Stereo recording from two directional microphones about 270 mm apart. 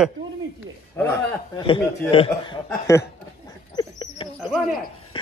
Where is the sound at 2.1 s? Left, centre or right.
Centre.